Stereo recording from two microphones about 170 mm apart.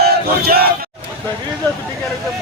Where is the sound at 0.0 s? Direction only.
65° right (ahead or behind).